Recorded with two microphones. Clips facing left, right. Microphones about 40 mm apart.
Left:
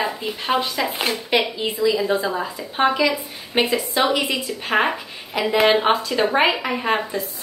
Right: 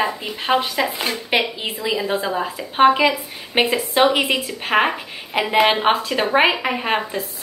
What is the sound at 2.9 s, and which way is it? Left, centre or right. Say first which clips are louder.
Speech: right 2 dB; right.